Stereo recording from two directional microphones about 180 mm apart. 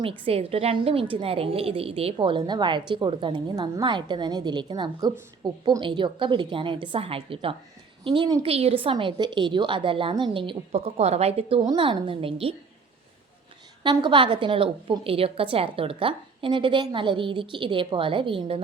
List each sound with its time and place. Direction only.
0.0 s a woman's voice: 30° right (ahead or behind)
13.8 s a woman's voice: 25° right (ahead or behind)